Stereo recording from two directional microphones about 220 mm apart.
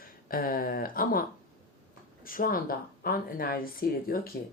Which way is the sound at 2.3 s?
40° left (ahead or behind).